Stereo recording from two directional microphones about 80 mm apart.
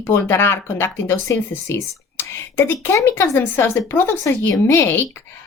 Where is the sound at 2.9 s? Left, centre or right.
Left.